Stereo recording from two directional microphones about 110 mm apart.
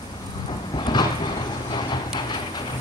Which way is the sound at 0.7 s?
45° left (ahead or behind).